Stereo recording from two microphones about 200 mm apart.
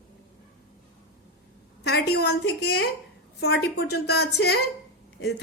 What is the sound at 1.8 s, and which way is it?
A woman's voice, 55° left (ahead or behind).